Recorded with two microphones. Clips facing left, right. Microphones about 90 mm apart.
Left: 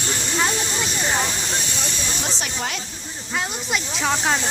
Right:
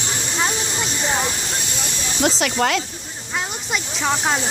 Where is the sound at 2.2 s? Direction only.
85° right.